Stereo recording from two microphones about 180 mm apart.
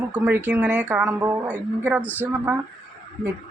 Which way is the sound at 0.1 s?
10° right (ahead or behind).